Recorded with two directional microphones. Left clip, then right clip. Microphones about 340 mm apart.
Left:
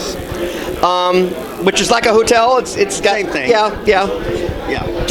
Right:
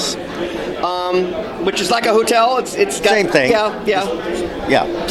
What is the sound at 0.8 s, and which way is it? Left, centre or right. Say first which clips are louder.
A man's voice: left 6 dB; left.